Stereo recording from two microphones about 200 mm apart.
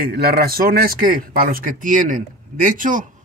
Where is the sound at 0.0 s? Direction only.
50° right (ahead or behind).